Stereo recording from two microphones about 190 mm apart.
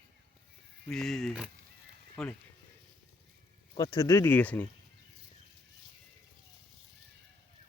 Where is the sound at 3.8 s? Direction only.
20° left (ahead or behind).